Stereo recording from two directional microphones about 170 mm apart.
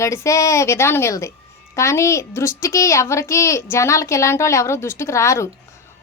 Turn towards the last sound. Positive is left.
turn(degrees=15)  # may be behind; listen again after turning